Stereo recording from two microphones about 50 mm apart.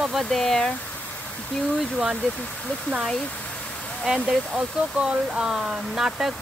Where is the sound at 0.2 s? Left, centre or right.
Centre.